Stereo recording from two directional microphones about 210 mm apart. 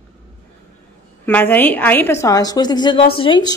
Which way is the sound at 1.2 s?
10° left (ahead or behind).